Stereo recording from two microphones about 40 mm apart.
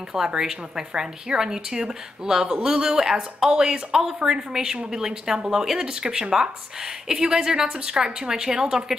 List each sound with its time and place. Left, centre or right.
0.1 s a woman's voice: centre